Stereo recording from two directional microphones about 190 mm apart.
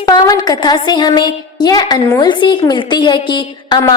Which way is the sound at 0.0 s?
20° left (ahead or behind).